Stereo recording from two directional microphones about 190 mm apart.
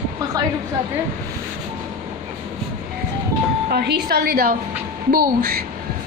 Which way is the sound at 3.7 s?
55° right (ahead or behind).